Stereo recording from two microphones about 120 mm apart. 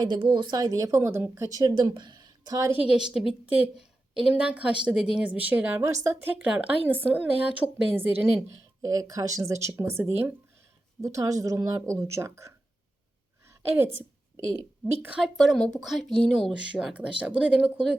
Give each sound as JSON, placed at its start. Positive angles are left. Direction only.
{"t": 0.0, "sound": "speech", "side_deg": -35}
{"t": 2.8, "sound": "a woman's voice", "side_deg": -5}
{"t": 6.4, "sound": "speech", "side_deg": -10}
{"t": 8.9, "sound": "a woman's voice", "side_deg": -30}
{"t": 11.0, "sound": "a woman's voice", "side_deg": -30}
{"t": 13.7, "sound": "a sound", "side_deg": -20}
{"t": 15.1, "sound": "speech", "side_deg": 0}